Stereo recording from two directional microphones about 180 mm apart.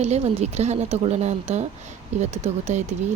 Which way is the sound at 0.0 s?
35° right (ahead or behind).